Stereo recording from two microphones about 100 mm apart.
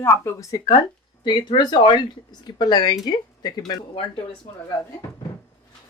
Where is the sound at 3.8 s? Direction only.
60° left (ahead or behind).